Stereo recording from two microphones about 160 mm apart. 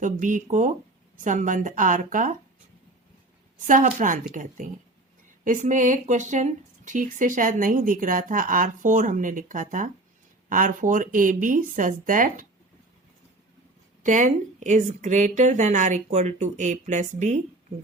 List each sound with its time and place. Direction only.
0.0 s a woman's voice: 55° right (ahead or behind)
3.6 s speech: 55° right (ahead or behind)
14.0 s a woman's voice: 50° right (ahead or behind)